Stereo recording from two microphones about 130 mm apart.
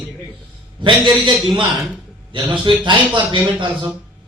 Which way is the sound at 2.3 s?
40° right (ahead or behind).